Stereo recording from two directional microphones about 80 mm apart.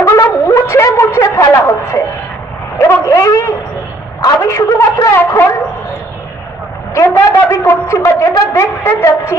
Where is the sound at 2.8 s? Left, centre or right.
Left.